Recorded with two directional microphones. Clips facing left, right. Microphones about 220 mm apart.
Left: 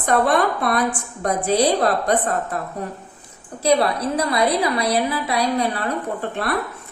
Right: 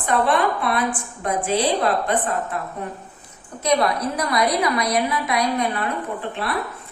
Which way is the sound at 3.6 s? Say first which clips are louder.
Left 2 dB; 30° left (ahead or behind).